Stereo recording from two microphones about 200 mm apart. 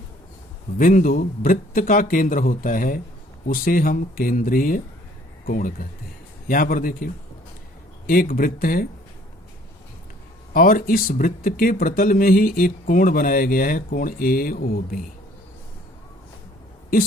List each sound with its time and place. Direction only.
0.8 s speech: 45° left (ahead or behind)
10.5 s speech: 45° left (ahead or behind)